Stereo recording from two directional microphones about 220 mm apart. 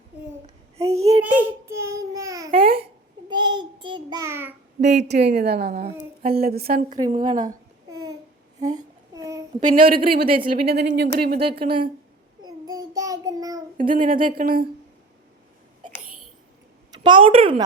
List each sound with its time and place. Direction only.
1.0 s child singing: 15° right (ahead or behind)
2.5 s babbling: 40° right (ahead or behind)
2.8 s child singing: 20° right (ahead or behind)
4.8 s a woman's voice: 50° right (ahead or behind)
7.1 s a woman's voice: 20° right (ahead or behind)
8.7 s child singing: 15° right (ahead or behind)
9.6 s a woman's voice: 35° right (ahead or behind)
12.4 s child singing: 20° right (ahead or behind)
13.7 s speech: 35° right (ahead or behind)
16.9 s a woman's voice: 20° right (ahead or behind)